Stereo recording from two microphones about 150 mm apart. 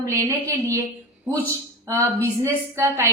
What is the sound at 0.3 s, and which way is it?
A woman's voice, 20° right (ahead or behind).